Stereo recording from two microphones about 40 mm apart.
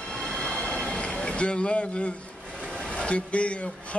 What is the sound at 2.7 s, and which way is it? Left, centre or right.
Speech, left.